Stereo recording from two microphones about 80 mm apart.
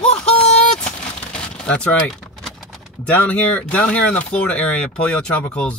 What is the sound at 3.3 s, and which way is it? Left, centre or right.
Speech, centre.